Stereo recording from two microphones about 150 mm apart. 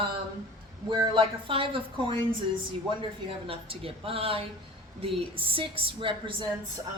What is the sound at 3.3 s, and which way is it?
Speech, 40° right (ahead or behind).